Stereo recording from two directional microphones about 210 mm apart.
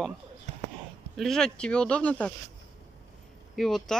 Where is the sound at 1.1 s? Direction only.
Centre (ahead or behind).